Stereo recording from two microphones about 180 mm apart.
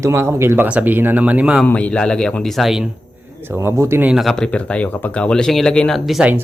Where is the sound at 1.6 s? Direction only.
5° left (ahead or behind).